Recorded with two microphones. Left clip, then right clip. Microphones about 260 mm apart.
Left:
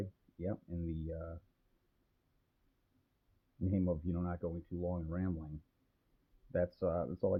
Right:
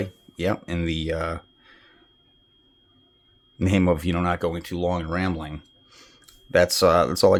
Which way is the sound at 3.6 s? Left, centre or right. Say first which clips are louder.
Right 16 dB; right.